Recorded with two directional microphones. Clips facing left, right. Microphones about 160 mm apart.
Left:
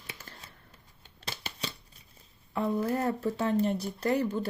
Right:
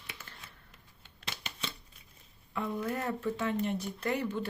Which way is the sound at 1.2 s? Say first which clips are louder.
Left 3 dB; 35° left (ahead or behind).